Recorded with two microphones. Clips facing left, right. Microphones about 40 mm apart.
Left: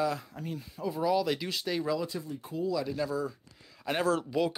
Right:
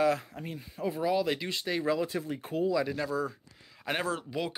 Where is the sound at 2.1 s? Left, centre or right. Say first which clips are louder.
Right 4 dB; right.